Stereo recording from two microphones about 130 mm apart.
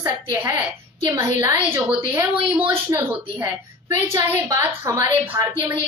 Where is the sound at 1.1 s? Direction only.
15° right (ahead or behind).